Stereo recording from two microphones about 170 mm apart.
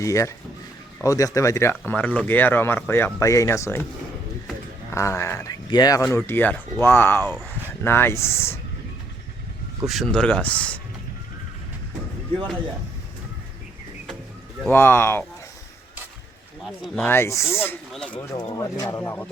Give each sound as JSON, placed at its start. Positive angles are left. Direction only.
{"t": 0.0, "sound": "speech", "side_deg": 20}
{"t": 4.9, "sound": "speech", "side_deg": 15}
{"t": 9.8, "sound": "speech", "side_deg": 0}
{"t": 14.7, "sound": "speech", "side_deg": 10}
{"t": 16.6, "sound": "speech", "side_deg": 0}
{"t": 17.1, "sound": "speech", "side_deg": 15}
{"t": 18.3, "sound": "speech", "side_deg": 20}